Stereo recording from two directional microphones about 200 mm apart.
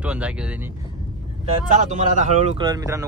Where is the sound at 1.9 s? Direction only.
35° right (ahead or behind).